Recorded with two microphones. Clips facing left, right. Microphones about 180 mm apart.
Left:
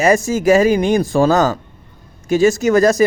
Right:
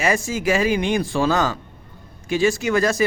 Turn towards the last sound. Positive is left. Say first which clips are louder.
# left 7 dB
turn(degrees=40)  # may be behind; listen again after turning